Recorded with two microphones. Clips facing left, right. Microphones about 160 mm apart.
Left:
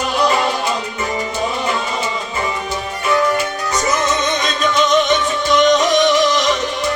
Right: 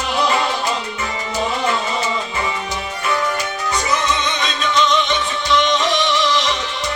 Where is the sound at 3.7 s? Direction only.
45° left (ahead or behind).